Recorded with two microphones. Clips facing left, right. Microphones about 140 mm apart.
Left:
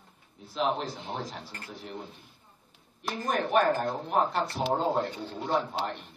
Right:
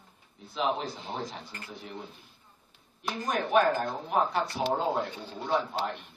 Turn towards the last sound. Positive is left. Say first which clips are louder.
# even
turn(degrees=0)  # may be behind; listen again after turning